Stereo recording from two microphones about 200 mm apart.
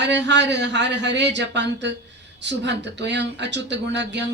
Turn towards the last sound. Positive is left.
turn(degrees=-60)  # may be behind; listen again after turning